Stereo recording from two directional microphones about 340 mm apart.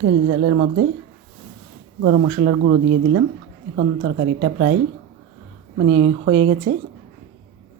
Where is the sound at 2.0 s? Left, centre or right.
Right.